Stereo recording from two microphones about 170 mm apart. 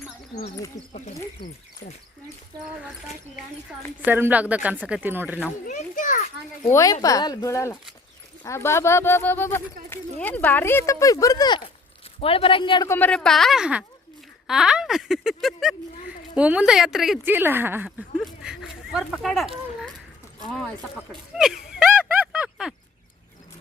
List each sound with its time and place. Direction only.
4.0 s speech: 10° right (ahead or behind)
5.6 s a child's voice: 50° left (ahead or behind)
6.7 s a woman's voice: 20° left (ahead or behind)
12.9 s speech: 10° left (ahead or behind)
21.1 s speech: 5° right (ahead or behind)